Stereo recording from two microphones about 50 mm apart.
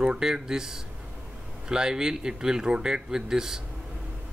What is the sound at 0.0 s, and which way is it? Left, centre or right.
Speech, centre.